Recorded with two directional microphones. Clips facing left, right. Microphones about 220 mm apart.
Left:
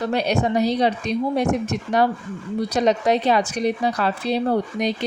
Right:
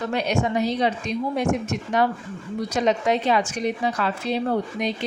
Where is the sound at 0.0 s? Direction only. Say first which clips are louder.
Left 3 dB; 35° left (ahead or behind).